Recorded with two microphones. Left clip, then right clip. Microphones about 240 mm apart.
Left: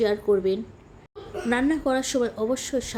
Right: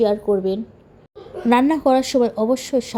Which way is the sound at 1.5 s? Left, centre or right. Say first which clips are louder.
Right 8 dB; right.